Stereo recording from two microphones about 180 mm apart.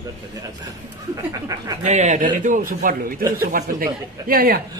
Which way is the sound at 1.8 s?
40° right (ahead or behind).